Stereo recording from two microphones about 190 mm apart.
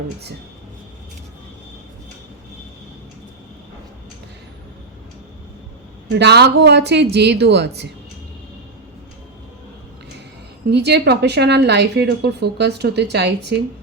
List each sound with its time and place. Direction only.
6.1 s speech: 60° right (ahead or behind)
10.7 s speech: 60° right (ahead or behind)